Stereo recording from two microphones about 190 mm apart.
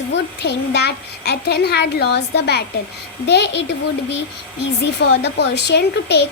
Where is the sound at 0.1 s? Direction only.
60° left (ahead or behind).